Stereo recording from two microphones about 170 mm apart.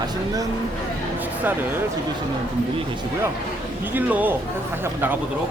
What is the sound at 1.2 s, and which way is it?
Speech, 10° right (ahead or behind).